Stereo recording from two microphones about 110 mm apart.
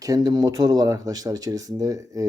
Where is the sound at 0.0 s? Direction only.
35° right (ahead or behind).